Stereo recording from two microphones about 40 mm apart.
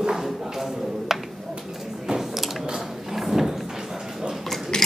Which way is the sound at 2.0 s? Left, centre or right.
Centre.